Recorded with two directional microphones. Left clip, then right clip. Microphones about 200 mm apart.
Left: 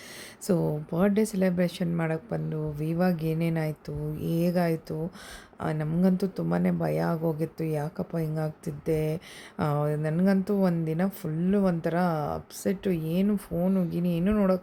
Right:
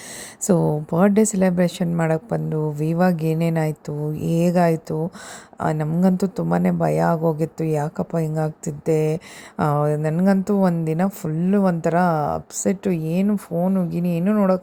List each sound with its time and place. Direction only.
0.4 s speech: 20° right (ahead or behind)